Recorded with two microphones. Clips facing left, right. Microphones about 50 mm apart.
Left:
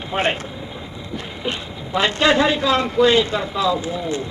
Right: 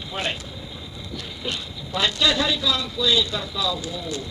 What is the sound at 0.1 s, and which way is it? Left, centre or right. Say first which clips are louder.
A man's voice: left 8 dB; left.